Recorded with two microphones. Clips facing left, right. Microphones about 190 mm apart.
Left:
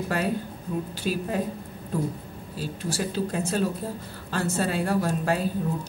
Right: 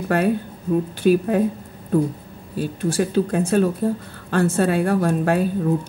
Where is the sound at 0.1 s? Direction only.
60° right (ahead or behind).